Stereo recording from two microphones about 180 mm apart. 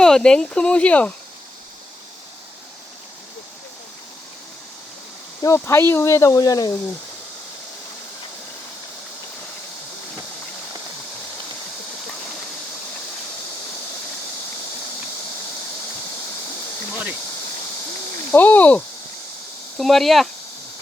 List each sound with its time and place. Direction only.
0.0 s speech: 5° left (ahead or behind)
5.4 s speech: 15° left (ahead or behind)
16.9 s insect: 5° right (ahead or behind)
18.3 s speech: 10° left (ahead or behind)